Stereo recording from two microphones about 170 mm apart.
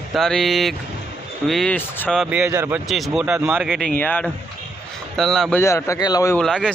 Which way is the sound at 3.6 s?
Centre (ahead or behind).